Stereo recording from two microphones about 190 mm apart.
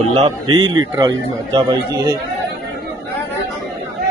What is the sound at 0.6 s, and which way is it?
Speech, 90° right.